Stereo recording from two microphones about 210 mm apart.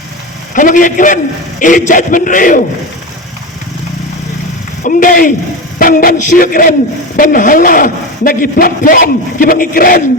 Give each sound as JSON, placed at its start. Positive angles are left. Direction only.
{"t": 0.5, "sound": "a man's voice", "side_deg": 40}
{"t": 4.8, "sound": "a man's voice", "side_deg": 40}